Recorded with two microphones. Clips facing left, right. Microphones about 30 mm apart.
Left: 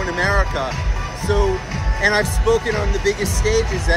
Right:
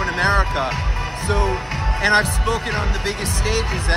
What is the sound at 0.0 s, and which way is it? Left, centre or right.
Speech, right.